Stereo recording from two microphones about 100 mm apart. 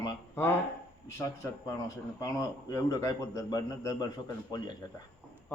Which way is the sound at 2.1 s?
40° left (ahead or behind).